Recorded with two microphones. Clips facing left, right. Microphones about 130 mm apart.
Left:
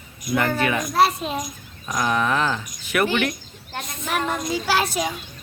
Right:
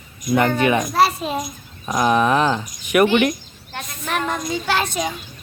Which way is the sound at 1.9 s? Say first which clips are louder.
Right 5 dB; 20° right (ahead or behind).